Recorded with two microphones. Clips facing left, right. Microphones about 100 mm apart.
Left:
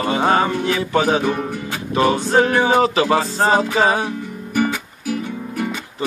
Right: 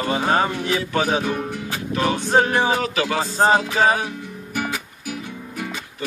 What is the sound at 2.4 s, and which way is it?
Speech, 25° right (ahead or behind).